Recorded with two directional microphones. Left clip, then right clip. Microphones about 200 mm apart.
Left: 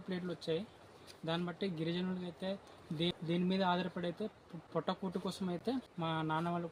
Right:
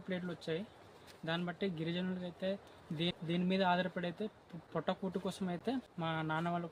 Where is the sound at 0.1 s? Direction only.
10° right (ahead or behind).